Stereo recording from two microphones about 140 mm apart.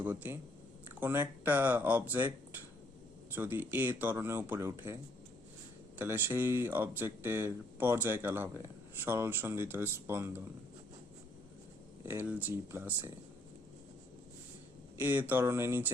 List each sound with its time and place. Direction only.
0.0 s speech: 15° right (ahead or behind)
6.0 s speech: 15° right (ahead or behind)
12.0 s speech: 15° right (ahead or behind)
15.0 s speech: 15° right (ahead or behind)